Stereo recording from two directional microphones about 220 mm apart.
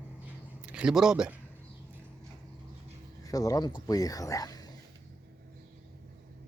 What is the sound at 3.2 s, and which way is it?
Speech, 15° left (ahead or behind).